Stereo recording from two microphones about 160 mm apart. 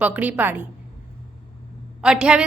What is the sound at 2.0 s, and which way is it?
Speech, 5° right (ahead or behind).